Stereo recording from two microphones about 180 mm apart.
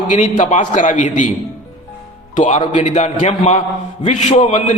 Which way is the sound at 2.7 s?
40° left (ahead or behind).